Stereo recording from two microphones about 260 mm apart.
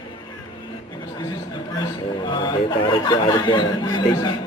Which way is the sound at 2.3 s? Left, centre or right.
Centre.